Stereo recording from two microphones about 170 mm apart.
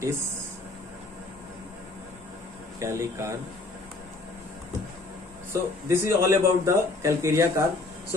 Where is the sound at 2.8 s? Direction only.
15° right (ahead or behind).